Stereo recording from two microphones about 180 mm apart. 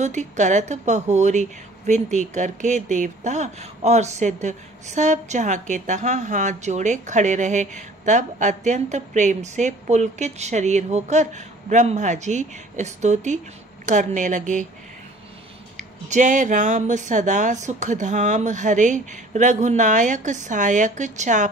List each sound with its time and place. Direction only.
0.0 s speech: 40° right (ahead or behind)
16.1 s speech: 45° right (ahead or behind)